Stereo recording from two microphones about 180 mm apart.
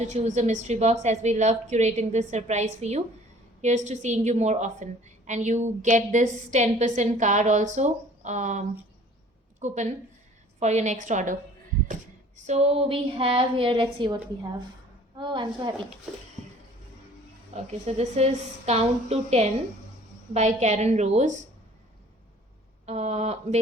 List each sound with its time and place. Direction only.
0.0 s a woman's voice: 40° right (ahead or behind)
12.5 s a woman's voice: 35° right (ahead or behind)
17.5 s a woman's voice: 35° right (ahead or behind)
22.9 s a woman's voice: 40° right (ahead or behind)